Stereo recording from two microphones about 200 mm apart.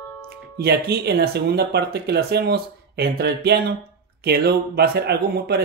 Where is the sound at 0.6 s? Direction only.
55° right (ahead or behind).